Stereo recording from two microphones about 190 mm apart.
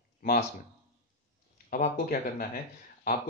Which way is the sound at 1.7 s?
50° left (ahead or behind).